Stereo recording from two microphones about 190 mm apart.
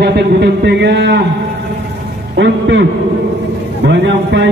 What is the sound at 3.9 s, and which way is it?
Speech, 70° right (ahead or behind).